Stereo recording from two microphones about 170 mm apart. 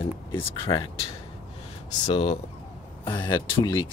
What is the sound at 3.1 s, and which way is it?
Speech, 25° left (ahead or behind).